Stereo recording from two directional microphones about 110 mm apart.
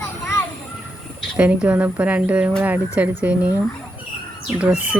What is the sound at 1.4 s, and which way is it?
Speech, 10° right (ahead or behind).